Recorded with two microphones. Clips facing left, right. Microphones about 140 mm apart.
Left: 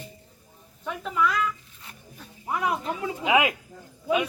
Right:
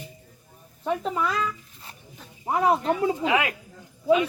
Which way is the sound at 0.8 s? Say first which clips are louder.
Right 1 dB; 35° right (ahead or behind).